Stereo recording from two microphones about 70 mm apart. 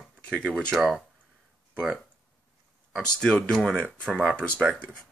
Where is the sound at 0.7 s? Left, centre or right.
Centre.